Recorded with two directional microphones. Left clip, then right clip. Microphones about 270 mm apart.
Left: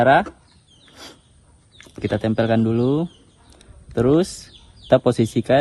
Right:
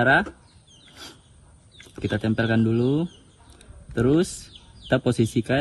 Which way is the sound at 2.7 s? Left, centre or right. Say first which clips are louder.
Left 3 dB; left.